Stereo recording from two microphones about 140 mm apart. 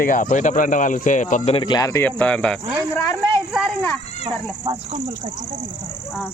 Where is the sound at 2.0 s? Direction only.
10° left (ahead or behind).